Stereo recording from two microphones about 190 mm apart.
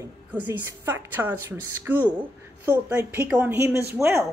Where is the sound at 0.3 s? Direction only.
10° right (ahead or behind).